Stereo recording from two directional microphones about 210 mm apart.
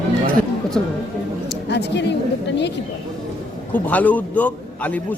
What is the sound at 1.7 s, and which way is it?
Speech, 55° left (ahead or behind).